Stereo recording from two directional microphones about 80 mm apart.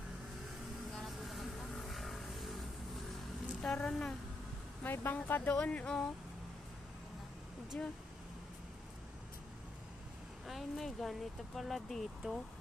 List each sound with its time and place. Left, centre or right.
0.9 s vehicle: centre
3.6 s speech: centre
4.8 s speech: left
7.7 s speech: centre
10.4 s speech: centre